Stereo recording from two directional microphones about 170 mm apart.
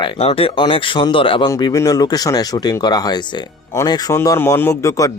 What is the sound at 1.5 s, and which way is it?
Speech, 20° left (ahead or behind).